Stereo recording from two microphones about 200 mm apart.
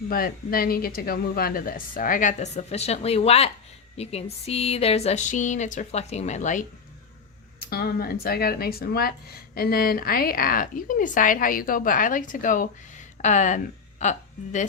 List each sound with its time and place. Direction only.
0.1 s a woman's voice: 45° left (ahead or behind); by 3.5 s 30° left (ahead or behind)
3.9 s a sound: 30° left (ahead or behind)
7.6 s a woman's voice: 50° left (ahead or behind)